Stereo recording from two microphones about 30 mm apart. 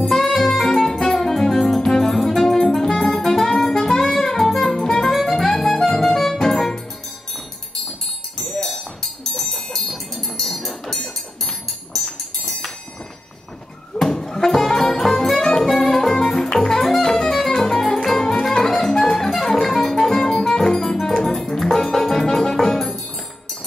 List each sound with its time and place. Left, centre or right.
0.1 s music: centre
8.7 s music: centre
9.4 s music: centre
10.3 s music: centre
14.0 s music: centre